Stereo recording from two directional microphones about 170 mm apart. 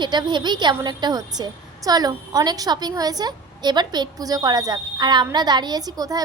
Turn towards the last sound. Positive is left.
turn(degrees=-20)  # may be behind; listen again after turning